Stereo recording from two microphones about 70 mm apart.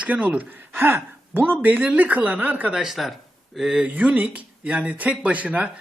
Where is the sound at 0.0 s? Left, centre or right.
Centre.